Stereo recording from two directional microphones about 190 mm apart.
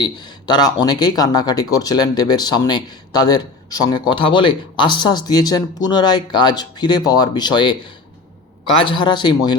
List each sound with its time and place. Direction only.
0.0 s speech: 20° left (ahead or behind)